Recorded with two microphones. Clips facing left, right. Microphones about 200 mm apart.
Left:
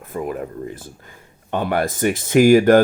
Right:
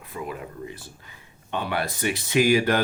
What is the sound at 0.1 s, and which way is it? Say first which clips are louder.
Speech: left 8 dB; 50° left (ahead or behind).